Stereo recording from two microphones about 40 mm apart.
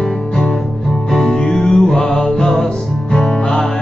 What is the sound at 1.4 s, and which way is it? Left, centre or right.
Music, centre.